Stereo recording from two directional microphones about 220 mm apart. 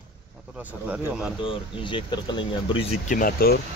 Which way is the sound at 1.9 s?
20° left (ahead or behind).